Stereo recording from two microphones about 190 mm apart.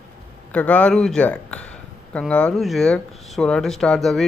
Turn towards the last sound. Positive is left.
turn(degrees=0)  # may be behind; listen again after turning